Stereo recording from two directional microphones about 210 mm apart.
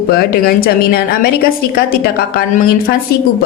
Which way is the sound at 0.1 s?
45° left (ahead or behind).